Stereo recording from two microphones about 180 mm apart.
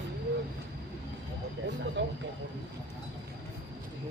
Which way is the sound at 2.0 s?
80° right.